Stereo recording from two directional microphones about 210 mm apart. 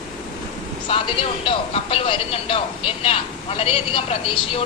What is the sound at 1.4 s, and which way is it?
Speech, 25° left (ahead or behind).